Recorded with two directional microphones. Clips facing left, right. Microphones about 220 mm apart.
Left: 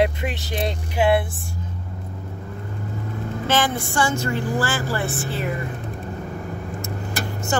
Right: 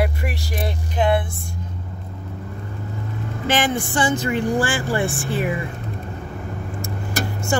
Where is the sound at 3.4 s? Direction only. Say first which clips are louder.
Right 2 dB; 15° right (ahead or behind).